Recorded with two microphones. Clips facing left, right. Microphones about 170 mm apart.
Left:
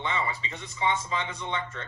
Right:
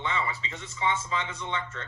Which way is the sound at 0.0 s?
15° left (ahead or behind).